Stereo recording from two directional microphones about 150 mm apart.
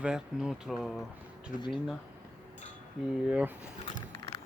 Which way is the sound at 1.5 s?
60° left (ahead or behind).